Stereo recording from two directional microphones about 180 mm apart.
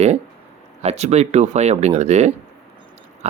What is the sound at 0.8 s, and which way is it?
Speech, 35° right (ahead or behind).